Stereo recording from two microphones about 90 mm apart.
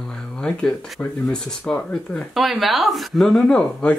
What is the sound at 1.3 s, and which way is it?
Speech, 10° left (ahead or behind).